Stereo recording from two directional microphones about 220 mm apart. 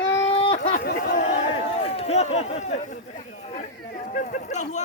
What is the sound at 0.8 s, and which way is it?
Speech, 45° left (ahead or behind).